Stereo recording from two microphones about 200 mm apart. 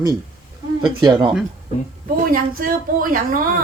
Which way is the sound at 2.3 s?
45° right (ahead or behind).